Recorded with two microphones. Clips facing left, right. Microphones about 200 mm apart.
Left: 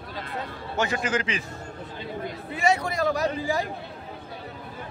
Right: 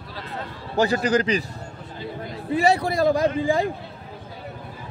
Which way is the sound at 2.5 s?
35° right (ahead or behind).